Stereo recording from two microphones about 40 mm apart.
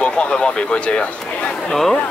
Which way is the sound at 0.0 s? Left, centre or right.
Left.